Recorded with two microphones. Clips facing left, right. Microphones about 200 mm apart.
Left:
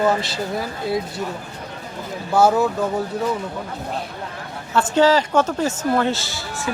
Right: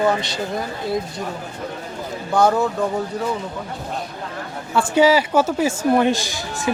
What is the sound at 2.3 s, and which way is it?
Speech, 5° left (ahead or behind).